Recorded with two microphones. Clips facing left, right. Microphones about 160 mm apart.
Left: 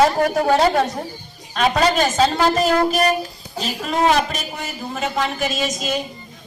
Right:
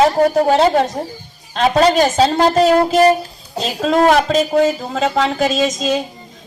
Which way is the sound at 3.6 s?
90° right.